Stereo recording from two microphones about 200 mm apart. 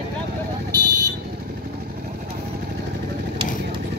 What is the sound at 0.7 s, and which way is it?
Vehicle, 20° right (ahead or behind).